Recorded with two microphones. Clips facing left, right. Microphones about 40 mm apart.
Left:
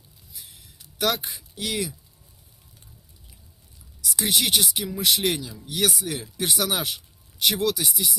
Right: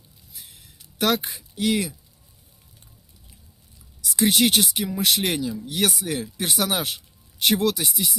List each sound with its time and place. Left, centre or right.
0.9 s speech: right
4.3 s speech: right
4.6 s speech: right